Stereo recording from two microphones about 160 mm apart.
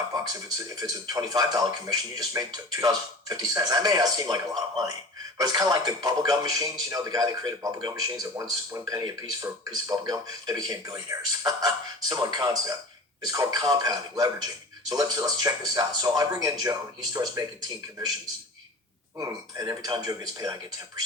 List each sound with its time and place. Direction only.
0.1 s a man's voice: 25° right (ahead or behind)
5.4 s a man's voice: 20° right (ahead or behind)
19.2 s a man's voice: 20° right (ahead or behind)